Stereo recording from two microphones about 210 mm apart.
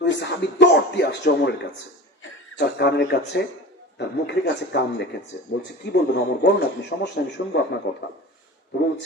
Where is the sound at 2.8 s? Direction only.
55° left (ahead or behind).